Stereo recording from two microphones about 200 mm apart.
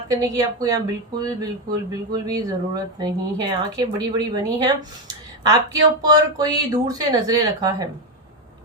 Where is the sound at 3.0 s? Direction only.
20° right (ahead or behind).